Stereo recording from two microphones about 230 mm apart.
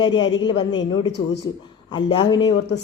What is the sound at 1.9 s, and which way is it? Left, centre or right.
Speech, centre.